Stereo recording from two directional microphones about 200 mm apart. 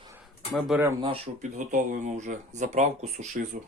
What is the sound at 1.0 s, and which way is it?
Speech, 30° right (ahead or behind).